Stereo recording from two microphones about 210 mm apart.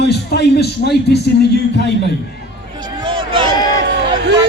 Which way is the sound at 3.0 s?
25° right (ahead or behind).